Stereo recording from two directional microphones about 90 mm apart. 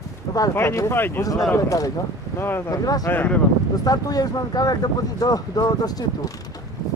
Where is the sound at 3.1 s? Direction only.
20° left (ahead or behind).